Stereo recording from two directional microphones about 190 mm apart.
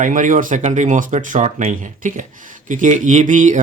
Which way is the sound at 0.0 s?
45° right (ahead or behind).